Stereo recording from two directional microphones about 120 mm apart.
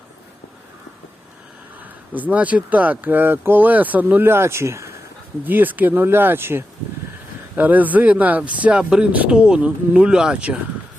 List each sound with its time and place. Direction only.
2.1 s speech: 15° right (ahead or behind)